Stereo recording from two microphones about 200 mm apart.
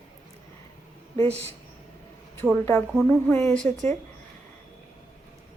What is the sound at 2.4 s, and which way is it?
Speech, centre (ahead or behind).